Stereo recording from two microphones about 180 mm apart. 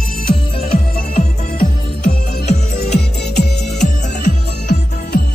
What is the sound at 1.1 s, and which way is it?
Music, 55° left (ahead or behind).